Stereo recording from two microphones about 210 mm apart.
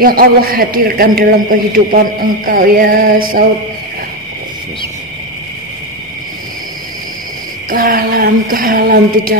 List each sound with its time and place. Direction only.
0.0 s a man's voice: 45° right (ahead or behind)
7.7 s a man's voice: 45° right (ahead or behind)